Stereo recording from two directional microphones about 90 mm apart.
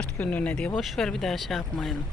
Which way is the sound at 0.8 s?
5° left (ahead or behind).